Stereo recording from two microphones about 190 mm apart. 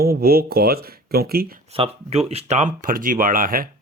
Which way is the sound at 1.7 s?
30° right (ahead or behind).